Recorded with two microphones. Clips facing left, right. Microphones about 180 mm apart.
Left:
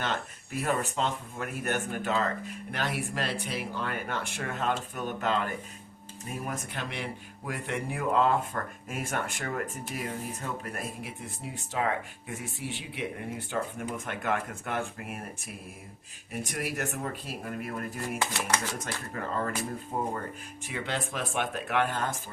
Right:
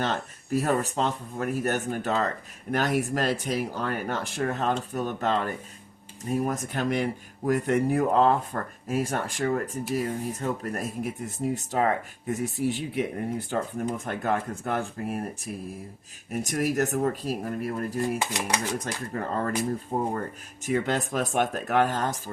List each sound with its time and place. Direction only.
0.0 s speech: 35° right (ahead or behind)
16.3 s speech: 40° right (ahead or behind)
18.2 s speech: 15° right (ahead or behind)
19.1 s speech: 35° right (ahead or behind)